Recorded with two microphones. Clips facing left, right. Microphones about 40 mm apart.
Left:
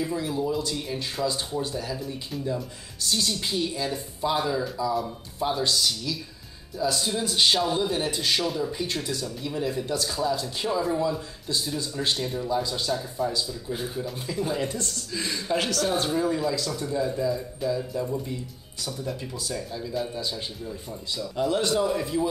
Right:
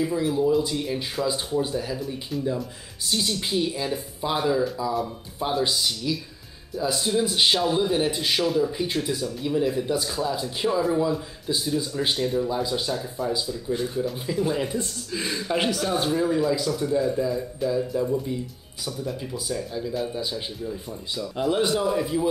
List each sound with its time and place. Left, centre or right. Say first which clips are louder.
0.0 s a man's voice: right 5 dB; centre
2.0 s a man's voice: right 3 dB; centre
12.6 s a man's voice: right 2 dB; centre
13.2 s a man's voice: right 1 dB; centre
19.5 s a man's voice: right 4 dB; centre
21.2 s a man's voice: right 2 dB; centre